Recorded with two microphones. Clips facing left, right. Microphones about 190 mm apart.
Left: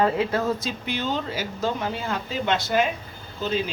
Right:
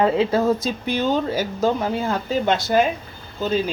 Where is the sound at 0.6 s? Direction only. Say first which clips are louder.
Right 6 dB; 40° right (ahead or behind).